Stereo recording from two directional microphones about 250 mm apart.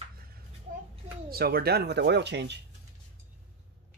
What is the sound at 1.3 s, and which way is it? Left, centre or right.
Speech, right.